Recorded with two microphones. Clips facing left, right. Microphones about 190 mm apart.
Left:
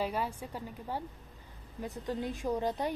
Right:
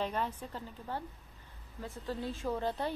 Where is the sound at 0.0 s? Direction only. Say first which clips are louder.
Left 1 dB; 10° left (ahead or behind).